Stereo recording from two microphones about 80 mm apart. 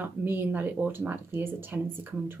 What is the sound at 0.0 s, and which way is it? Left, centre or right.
Speech, right.